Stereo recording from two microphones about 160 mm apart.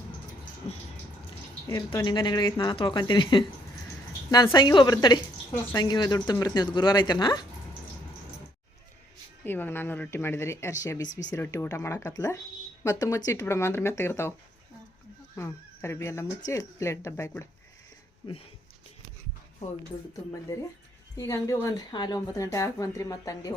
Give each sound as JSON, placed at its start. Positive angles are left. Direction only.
{"t": 0.7, "sound": "a sound", "side_deg": 40}
{"t": 1.6, "sound": "speech", "side_deg": 25}
{"t": 9.4, "sound": "speech", "side_deg": 10}
{"t": 15.4, "sound": "speech", "side_deg": 15}
{"t": 18.2, "sound": "speech", "side_deg": 30}
{"t": 21.2, "sound": "speech", "side_deg": 20}